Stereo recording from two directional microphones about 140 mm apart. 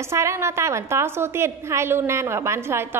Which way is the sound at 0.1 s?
20° right (ahead or behind).